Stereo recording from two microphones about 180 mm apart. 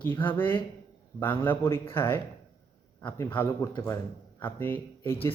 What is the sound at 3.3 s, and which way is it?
A man's voice, 15° left (ahead or behind).